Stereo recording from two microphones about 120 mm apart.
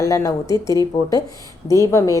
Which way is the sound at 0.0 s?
25° left (ahead or behind).